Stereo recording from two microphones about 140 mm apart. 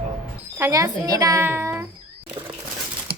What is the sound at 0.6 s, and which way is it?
Speech, 25° right (ahead or behind).